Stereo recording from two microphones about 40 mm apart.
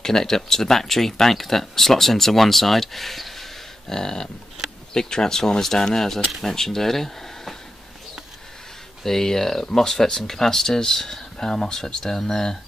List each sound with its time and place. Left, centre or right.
0.0 s speech: centre
3.9 s speech: centre
9.0 s speech: centre